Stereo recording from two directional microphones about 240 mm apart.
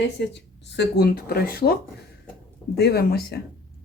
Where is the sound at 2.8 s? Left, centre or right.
Left.